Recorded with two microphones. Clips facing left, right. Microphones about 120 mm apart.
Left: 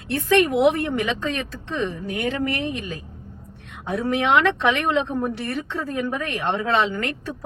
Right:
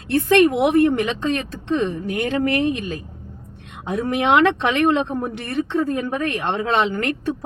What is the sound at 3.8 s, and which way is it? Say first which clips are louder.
A woman's voice: right 2 dB; 15° right (ahead or behind).